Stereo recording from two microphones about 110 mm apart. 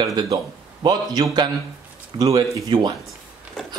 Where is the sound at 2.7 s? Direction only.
40° right (ahead or behind).